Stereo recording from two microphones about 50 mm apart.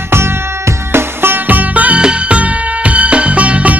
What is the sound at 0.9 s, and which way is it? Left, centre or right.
Music, right.